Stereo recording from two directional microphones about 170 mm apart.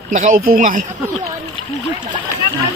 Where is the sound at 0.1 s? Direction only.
55° right (ahead or behind).